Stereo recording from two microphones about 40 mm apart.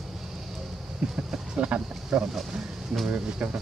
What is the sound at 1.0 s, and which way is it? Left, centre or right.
Speech, right.